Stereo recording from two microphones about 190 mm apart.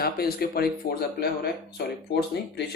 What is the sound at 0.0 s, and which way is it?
Speech, 55° left (ahead or behind).